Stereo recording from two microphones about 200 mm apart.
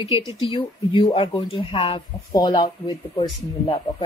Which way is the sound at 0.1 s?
15° right (ahead or behind).